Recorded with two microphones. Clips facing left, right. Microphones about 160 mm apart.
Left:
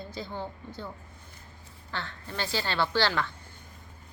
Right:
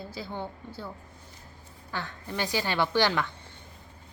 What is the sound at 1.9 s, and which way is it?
A woman's voice, 15° right (ahead or behind).